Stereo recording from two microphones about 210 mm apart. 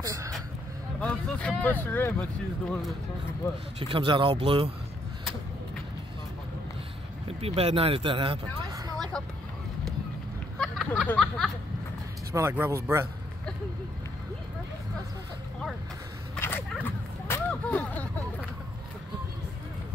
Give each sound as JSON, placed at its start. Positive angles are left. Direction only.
{"t": 0.0, "sound": "a sound", "side_deg": -15}
{"t": 1.0, "sound": "speech", "side_deg": 5}
{"t": 3.8, "sound": "speech", "side_deg": -25}
{"t": 7.2, "sound": "speech", "side_deg": -30}
{"t": 10.6, "sound": "speech", "side_deg": 0}
{"t": 12.3, "sound": "a man's voice", "side_deg": -15}
{"t": 16.3, "sound": "a sound", "side_deg": 10}